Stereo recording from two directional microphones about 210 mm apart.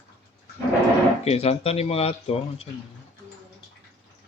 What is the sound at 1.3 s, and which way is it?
Speech, 30° left (ahead or behind).